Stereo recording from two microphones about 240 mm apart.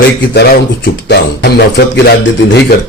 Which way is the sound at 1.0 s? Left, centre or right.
Left.